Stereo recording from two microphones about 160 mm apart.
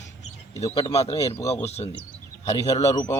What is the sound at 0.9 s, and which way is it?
Speech, 40° left (ahead or behind).